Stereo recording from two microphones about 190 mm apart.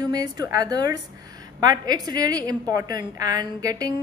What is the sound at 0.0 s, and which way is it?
A woman's voice, 20° right (ahead or behind).